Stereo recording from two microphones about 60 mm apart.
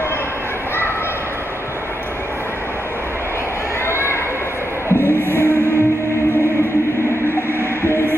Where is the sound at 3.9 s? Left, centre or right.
Left.